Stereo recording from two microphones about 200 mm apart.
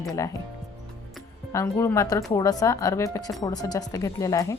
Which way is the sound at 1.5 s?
10° left (ahead or behind).